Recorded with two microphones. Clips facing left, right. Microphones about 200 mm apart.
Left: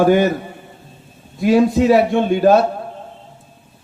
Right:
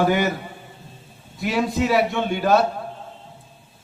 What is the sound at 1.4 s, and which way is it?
A man's voice, 45° left (ahead or behind).